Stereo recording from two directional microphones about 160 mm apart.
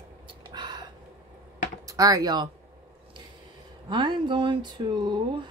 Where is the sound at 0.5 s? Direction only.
25° right (ahead or behind).